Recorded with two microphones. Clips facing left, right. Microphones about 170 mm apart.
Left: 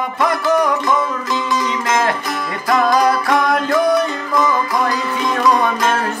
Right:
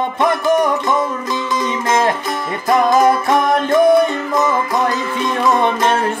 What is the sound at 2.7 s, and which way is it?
Music, 20° right (ahead or behind).